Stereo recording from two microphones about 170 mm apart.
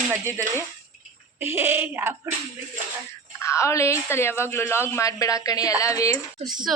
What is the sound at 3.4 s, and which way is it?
A woman's voice, 15° left (ahead or behind).